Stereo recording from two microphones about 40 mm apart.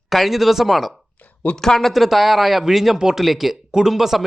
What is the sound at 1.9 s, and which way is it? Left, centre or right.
A man's voice, centre.